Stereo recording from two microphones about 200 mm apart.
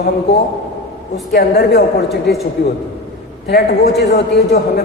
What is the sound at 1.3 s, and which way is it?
A man's voice, 55° left (ahead or behind).